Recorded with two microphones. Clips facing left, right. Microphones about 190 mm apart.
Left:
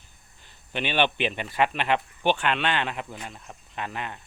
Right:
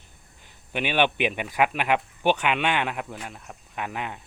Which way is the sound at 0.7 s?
10° right (ahead or behind).